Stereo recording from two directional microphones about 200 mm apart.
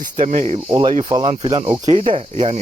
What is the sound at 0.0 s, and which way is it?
Speech, 40° right (ahead or behind).